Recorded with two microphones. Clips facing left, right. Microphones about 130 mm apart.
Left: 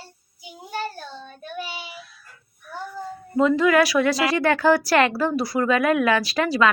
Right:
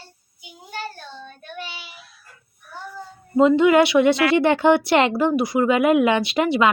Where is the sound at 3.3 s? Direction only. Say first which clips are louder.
Right 3 dB; 25° right (ahead or behind).